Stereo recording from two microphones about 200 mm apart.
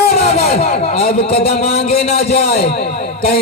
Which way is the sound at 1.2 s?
30° left (ahead or behind).